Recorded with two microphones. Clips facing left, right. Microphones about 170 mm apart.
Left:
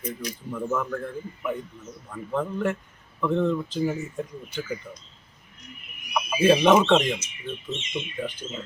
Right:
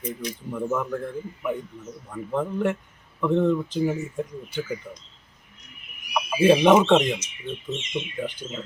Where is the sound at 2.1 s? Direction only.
10° right (ahead or behind).